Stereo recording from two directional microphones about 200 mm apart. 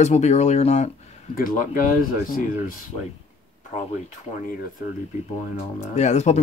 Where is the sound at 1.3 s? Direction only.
45° left (ahead or behind).